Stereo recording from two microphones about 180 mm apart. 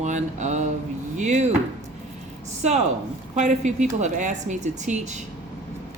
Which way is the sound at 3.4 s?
40° right (ahead or behind).